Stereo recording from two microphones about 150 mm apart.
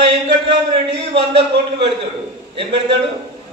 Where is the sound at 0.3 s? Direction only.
35° right (ahead or behind).